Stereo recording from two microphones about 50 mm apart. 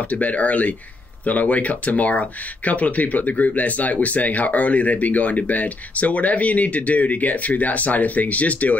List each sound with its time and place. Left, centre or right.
0.1 s speech: left